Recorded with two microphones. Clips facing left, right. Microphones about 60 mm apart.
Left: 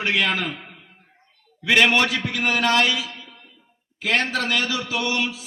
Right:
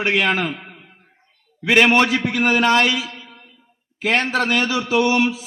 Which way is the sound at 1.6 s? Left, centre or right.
Right.